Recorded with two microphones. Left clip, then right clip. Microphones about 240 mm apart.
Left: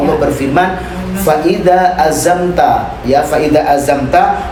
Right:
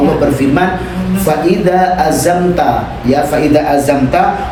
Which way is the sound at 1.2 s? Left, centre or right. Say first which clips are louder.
Left 2 dB; centre.